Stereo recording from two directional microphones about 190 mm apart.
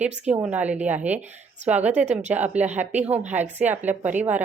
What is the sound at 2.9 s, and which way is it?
A woman's voice, 10° right (ahead or behind).